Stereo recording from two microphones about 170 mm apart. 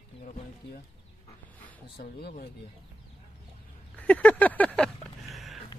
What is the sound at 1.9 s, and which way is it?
Speech, 70° left (ahead or behind).